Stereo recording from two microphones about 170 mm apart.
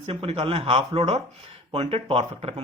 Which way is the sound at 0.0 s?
35° right (ahead or behind).